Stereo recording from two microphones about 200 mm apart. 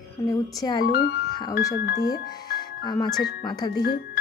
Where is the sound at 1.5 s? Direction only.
55° left (ahead or behind).